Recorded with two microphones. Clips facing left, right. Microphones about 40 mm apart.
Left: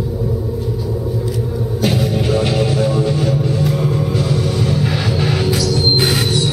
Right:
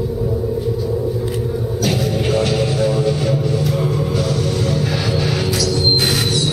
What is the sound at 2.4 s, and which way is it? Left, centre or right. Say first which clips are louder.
Music: left 1 dB; centre.